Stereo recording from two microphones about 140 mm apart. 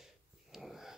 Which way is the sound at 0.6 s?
Centre (ahead or behind).